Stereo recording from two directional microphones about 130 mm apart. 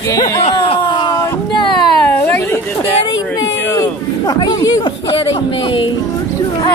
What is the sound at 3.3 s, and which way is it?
A woman's voice, 30° left (ahead or behind).